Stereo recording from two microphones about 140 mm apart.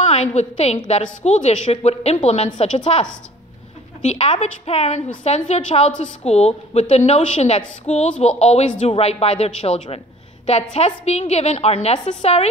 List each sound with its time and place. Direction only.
0.0 s a woman's voice: 55° left (ahead or behind)